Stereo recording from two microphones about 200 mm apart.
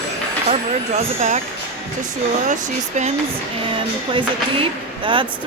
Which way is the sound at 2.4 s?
35° right (ahead or behind).